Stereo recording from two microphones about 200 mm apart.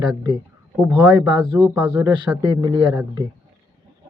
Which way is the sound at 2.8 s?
5° right (ahead or behind).